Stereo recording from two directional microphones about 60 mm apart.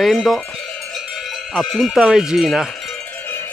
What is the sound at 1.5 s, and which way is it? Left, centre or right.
Speech, centre.